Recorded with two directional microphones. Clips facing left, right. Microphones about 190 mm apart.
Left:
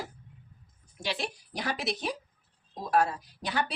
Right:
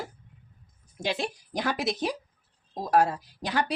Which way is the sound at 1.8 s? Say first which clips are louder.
Right 4 dB; 45° right (ahead or behind).